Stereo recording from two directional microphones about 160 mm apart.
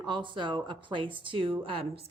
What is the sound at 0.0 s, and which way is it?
Speech, 30° right (ahead or behind).